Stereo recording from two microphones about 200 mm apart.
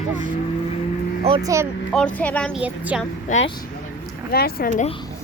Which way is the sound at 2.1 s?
5° left (ahead or behind).